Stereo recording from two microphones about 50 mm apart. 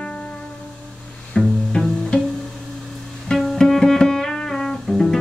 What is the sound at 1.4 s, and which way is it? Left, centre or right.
Music, centre.